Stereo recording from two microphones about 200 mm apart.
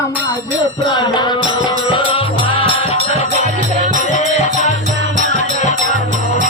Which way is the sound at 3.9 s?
40° left (ahead or behind).